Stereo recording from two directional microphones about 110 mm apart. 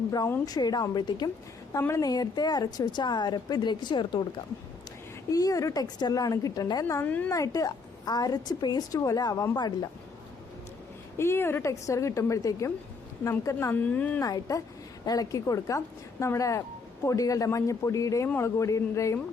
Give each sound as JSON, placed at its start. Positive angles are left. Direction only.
{"t": 0.4, "sound": "a woman's voice", "side_deg": 35}
{"t": 5.3, "sound": "a woman's voice", "side_deg": 35}
{"t": 7.0, "sound": "speech", "side_deg": 15}
{"t": 7.3, "sound": "a woman's voice", "side_deg": 30}
{"t": 11.2, "sound": "a woman's voice", "side_deg": 20}
{"t": 13.7, "sound": "speech", "side_deg": 15}
{"t": 14.2, "sound": "a woman's voice", "side_deg": 35}